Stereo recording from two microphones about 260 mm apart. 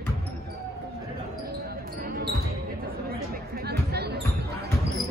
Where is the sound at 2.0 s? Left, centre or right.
Right.